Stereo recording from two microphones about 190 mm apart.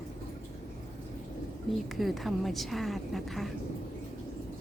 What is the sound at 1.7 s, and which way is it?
A woman's voice, centre (ahead or behind).